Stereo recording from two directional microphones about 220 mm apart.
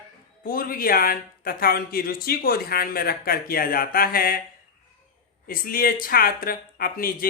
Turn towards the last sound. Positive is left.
turn(degrees=40)  # may be behind; listen again after turning